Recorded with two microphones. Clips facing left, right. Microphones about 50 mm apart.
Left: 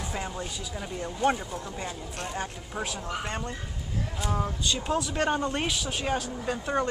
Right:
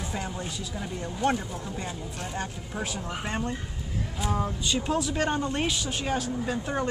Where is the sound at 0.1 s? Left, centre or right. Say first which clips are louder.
Even; centre.